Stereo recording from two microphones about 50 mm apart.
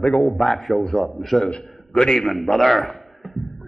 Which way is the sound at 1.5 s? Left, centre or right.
Centre.